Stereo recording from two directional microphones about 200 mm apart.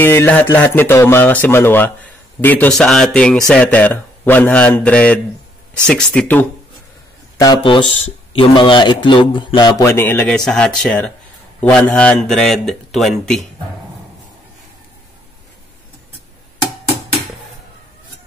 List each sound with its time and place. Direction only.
0.0 s speech: 10° left (ahead or behind)
7.3 s speech: 20° left (ahead or behind); by 13.4 s centre (ahead or behind)